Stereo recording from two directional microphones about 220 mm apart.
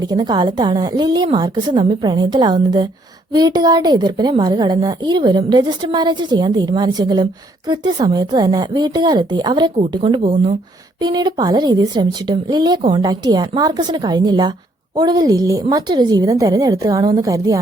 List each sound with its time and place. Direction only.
0.0 s a woman's voice: 20° right (ahead or behind)